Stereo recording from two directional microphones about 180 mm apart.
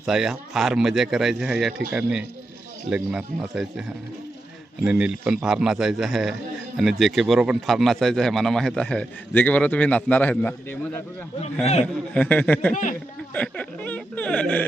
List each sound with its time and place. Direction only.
0.0 s a man's voice: 5° right (ahead or behind)
12.1 s speech: 10° left (ahead or behind)
12.7 s speech: 45° left (ahead or behind)
13.3 s speech: 10° left (ahead or behind)